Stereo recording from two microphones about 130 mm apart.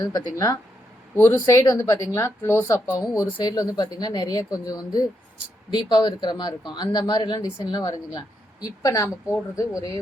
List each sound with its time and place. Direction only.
0.0 s speech: 30° left (ahead or behind)